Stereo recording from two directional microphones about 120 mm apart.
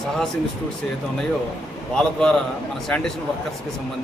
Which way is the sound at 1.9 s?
5° left (ahead or behind).